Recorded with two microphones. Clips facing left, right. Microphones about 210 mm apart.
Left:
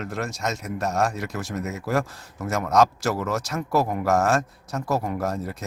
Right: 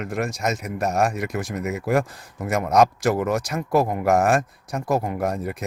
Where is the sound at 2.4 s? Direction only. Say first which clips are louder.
Right 2 dB; 15° right (ahead or behind).